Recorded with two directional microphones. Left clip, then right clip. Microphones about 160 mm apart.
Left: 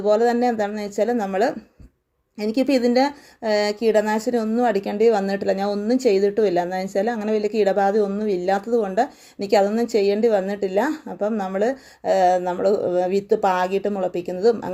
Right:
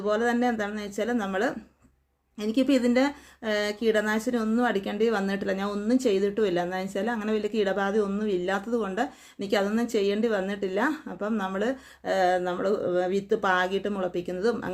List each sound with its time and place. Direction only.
0.0 s a woman's voice: 20° left (ahead or behind)